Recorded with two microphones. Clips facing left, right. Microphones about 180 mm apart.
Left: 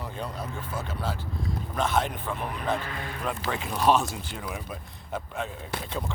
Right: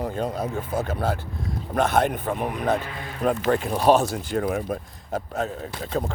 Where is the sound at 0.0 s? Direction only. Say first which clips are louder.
Right 8 dB; 45° right (ahead or behind).